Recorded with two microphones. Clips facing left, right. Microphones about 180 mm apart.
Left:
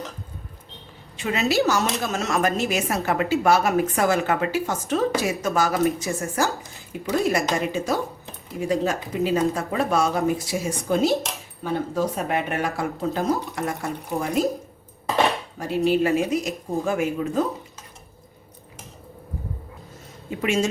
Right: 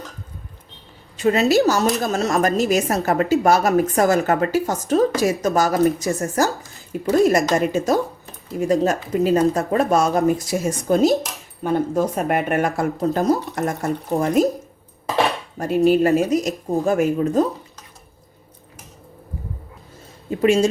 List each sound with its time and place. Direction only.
1.1 s a woman's voice: 40° right (ahead or behind)
15.5 s a woman's voice: 45° right (ahead or behind)
20.4 s a woman's voice: 35° right (ahead or behind)